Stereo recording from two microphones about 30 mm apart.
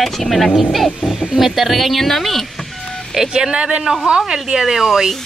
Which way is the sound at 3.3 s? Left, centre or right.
Right.